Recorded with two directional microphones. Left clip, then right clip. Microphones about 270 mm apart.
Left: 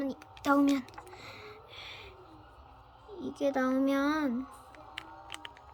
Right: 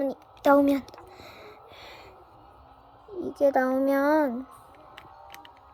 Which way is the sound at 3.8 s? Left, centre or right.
Right.